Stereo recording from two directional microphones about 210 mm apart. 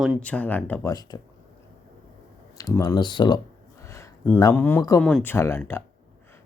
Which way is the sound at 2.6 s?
15° left (ahead or behind).